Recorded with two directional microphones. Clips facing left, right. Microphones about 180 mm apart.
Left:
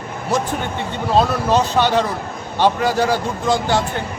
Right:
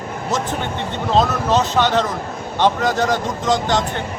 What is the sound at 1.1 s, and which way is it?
A man's voice, 10° left (ahead or behind).